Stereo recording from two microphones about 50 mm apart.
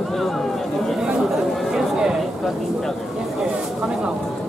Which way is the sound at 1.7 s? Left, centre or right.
Centre.